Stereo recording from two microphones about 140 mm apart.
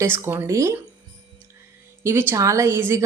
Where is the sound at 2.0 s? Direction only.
15° right (ahead or behind).